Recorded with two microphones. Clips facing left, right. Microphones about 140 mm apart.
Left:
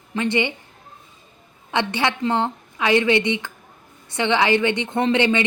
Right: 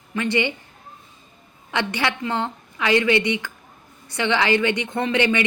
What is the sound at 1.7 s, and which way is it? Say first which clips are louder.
A woman's voice: left 2 dB; 20° left (ahead or behind).